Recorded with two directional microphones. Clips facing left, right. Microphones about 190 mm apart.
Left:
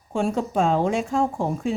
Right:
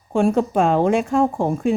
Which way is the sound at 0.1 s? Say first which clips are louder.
Right 6 dB; 55° right (ahead or behind).